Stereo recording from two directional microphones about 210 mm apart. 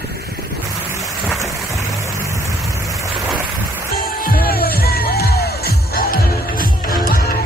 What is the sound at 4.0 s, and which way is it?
Music, 45° left (ahead or behind).